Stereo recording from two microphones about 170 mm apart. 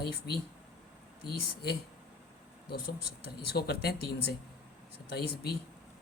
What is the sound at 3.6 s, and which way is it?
Speech, 65° left (ahead or behind).